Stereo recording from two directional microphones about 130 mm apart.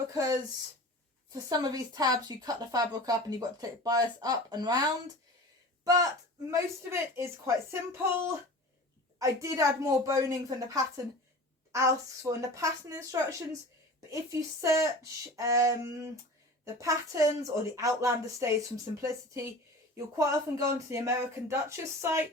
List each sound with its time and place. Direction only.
0.1 s speech: 25° right (ahead or behind)
5.8 s a woman's voice: 30° right (ahead or behind)
11.7 s speech: 25° right (ahead or behind)